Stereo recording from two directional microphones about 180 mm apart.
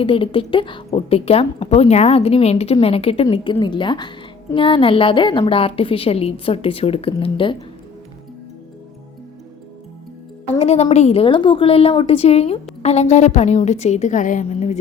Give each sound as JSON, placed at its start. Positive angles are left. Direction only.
{"t": 0.0, "sound": "a woman's voice", "side_deg": 30}
{"t": 10.6, "sound": "a woman's voice", "side_deg": 35}